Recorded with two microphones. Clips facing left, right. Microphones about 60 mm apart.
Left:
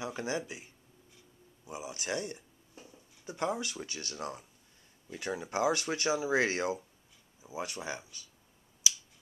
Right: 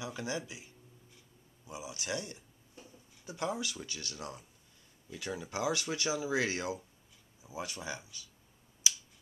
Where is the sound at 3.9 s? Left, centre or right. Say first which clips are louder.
Left 3 dB; left.